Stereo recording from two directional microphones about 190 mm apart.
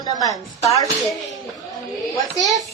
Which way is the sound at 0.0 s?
20° left (ahead or behind).